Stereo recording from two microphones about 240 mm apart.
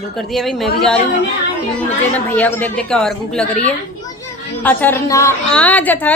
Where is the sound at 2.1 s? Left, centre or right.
Centre.